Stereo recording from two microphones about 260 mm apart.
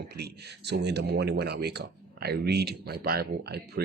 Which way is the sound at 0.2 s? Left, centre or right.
Right.